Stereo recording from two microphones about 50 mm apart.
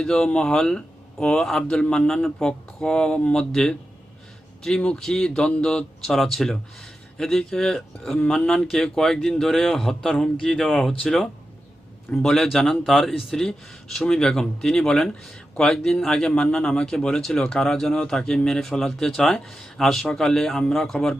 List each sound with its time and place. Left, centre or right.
0.0 s speech: centre
4.9 s speech: centre